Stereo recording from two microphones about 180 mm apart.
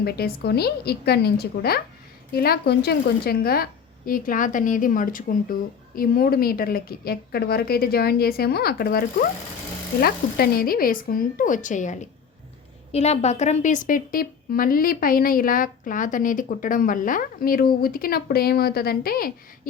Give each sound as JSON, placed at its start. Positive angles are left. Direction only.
{"t": 0.0, "sound": "a woman's voice", "side_deg": 60}